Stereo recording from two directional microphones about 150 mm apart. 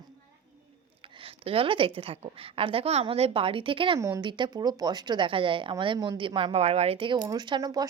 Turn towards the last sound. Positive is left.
turn(degrees=-25)  # may be behind; listen again after turning